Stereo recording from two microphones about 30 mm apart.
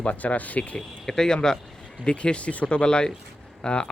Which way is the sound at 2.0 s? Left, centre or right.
Left.